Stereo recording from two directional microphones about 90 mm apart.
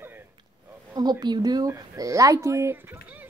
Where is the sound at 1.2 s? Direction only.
50° right (ahead or behind).